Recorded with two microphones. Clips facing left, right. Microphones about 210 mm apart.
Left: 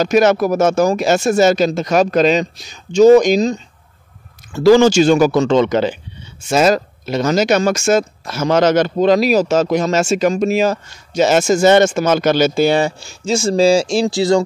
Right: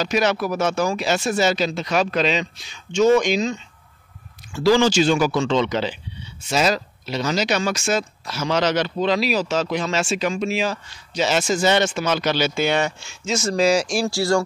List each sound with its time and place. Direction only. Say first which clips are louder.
0.0 s speech: left 8 dB; 45° left (ahead or behind); by 14.4 s 20° left (ahead or behind)